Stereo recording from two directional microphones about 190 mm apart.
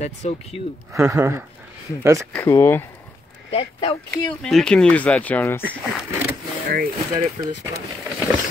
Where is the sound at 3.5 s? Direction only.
25° left (ahead or behind).